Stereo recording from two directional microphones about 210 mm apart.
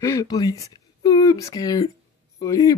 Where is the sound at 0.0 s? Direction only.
15° left (ahead or behind).